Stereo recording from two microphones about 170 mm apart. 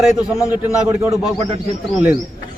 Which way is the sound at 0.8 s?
20° right (ahead or behind).